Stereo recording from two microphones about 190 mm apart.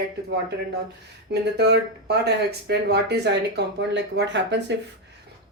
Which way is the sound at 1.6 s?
60° right (ahead or behind).